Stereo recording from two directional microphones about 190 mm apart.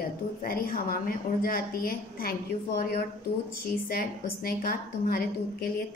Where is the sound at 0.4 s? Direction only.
50° left (ahead or behind).